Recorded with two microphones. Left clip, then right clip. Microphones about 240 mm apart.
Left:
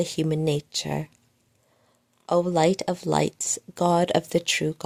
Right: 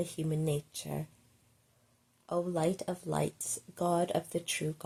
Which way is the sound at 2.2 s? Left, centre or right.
Left.